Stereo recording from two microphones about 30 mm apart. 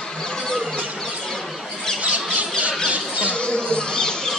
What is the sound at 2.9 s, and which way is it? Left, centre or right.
Squawk, right.